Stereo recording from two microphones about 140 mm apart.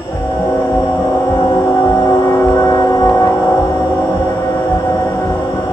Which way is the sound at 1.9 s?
20° left (ahead or behind).